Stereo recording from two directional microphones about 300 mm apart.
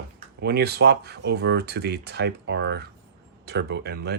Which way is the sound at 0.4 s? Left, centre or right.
Right.